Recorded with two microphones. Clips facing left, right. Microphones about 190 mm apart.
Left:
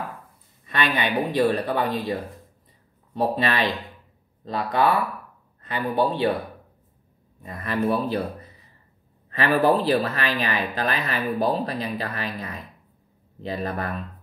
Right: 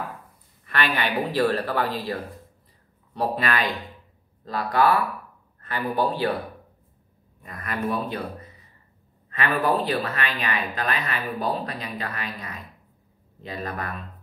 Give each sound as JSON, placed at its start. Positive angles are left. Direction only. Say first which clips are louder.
{"t": 0.7, "sound": "speech", "louder": "left 1 dB", "side_deg": 20}
{"t": 3.2, "sound": "speech", "louder": "left 2 dB", "side_deg": 25}
{"t": 7.4, "sound": "speech", "louder": "left 4 dB", "side_deg": 30}
{"t": 9.3, "sound": "speech", "louder": "left 4 dB", "side_deg": 30}